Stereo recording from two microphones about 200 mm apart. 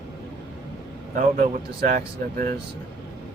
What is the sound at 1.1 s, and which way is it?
Speech, 45° right (ahead or behind).